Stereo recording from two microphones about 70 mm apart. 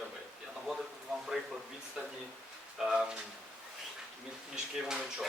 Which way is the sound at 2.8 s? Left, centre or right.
Centre.